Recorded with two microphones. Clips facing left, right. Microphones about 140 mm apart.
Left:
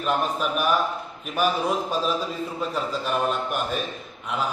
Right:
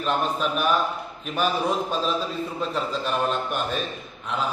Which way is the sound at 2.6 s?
5° left (ahead or behind).